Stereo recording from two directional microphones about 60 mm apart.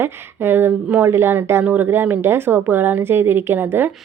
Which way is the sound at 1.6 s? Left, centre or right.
Right.